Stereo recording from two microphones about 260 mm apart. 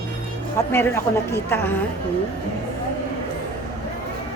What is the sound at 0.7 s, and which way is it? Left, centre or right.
A woman's voice, centre.